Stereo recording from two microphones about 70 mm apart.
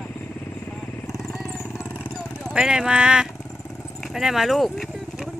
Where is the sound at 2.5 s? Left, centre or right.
Centre.